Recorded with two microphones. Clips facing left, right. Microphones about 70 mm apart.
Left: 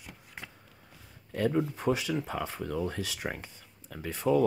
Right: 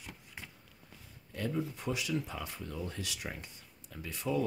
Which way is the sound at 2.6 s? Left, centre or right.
Left.